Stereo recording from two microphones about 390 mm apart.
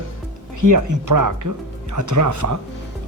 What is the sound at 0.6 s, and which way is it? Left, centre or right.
Speech, right.